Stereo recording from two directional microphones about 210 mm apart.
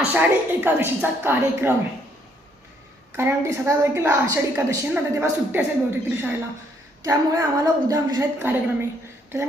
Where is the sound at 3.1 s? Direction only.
10° right (ahead or behind).